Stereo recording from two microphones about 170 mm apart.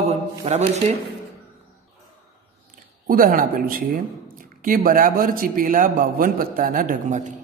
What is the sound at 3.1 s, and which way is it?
A man's voice, 55° right (ahead or behind).